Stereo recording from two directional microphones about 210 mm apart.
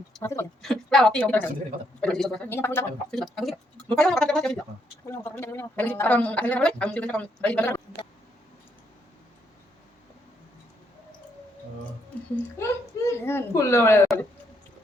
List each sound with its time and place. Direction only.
0.2 s speech: 15° left (ahead or behind)
0.6 s a woman's voice: centre (ahead or behind)
12.5 s a man's voice: 10° left (ahead or behind)